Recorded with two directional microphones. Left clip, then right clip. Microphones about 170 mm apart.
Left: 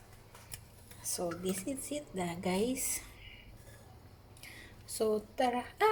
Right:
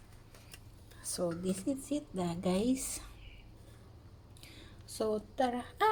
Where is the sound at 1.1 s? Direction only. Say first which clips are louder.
Right 1 dB; 30° right (ahead or behind).